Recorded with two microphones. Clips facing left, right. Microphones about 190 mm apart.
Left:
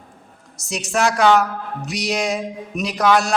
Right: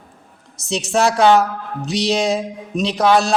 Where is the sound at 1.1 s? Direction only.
30° right (ahead or behind).